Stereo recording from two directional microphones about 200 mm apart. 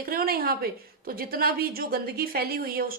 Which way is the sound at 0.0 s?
50° right (ahead or behind).